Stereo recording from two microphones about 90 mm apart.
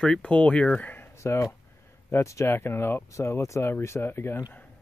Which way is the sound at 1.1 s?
30° left (ahead or behind).